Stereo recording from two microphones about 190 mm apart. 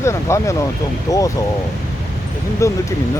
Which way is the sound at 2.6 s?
15° left (ahead or behind).